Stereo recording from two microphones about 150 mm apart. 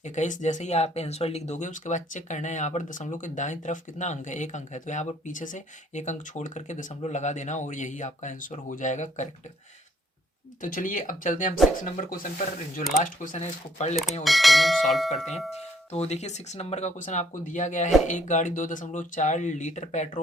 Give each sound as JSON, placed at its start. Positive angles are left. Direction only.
{"t": 0.0, "sound": "speech", "side_deg": 55}
{"t": 10.6, "sound": "speech", "side_deg": 65}
{"t": 14.3, "sound": "speech", "side_deg": 0}
{"t": 15.9, "sound": "speech", "side_deg": 45}